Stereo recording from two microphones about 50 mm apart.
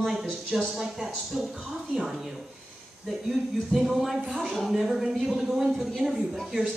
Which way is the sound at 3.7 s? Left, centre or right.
Centre.